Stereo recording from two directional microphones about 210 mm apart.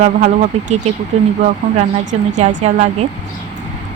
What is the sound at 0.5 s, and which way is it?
Speech, 30° right (ahead or behind).